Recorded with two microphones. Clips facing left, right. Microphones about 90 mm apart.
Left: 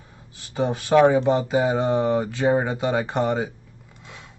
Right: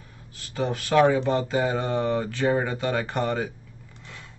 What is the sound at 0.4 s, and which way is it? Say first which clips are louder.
Speech: left 3 dB; 20° left (ahead or behind).